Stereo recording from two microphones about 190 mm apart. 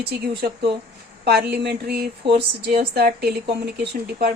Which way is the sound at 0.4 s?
50° right (ahead or behind).